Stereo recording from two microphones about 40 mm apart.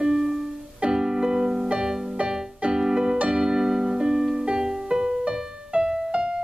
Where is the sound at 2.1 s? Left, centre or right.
Right.